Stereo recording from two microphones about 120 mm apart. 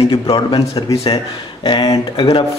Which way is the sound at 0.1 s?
40° left (ahead or behind).